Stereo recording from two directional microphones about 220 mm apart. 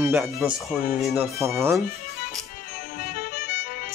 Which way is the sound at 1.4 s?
10° right (ahead or behind).